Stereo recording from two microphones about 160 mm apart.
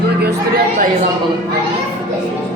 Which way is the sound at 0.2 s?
75° right (ahead or behind).